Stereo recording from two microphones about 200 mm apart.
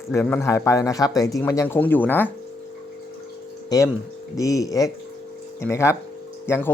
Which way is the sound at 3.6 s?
15° left (ahead or behind).